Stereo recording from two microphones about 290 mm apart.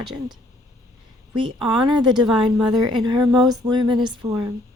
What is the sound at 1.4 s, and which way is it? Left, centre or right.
Speech, centre.